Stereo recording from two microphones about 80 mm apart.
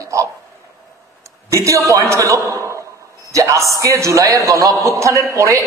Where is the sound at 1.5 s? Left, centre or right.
Right.